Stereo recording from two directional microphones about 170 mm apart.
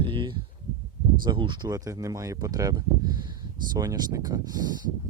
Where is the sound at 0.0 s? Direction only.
30° right (ahead or behind).